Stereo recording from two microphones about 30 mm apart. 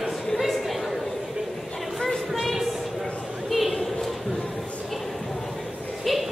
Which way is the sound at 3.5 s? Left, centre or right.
Centre.